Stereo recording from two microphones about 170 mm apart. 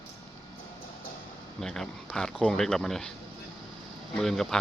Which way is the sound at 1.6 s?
5° left (ahead or behind).